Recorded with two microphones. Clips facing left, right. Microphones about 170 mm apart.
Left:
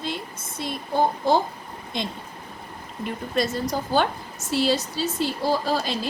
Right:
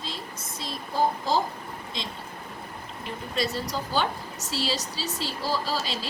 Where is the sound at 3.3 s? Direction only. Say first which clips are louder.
Left 4 dB; 50° left (ahead or behind).